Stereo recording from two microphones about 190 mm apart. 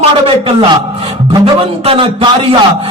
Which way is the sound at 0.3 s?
30° right (ahead or behind).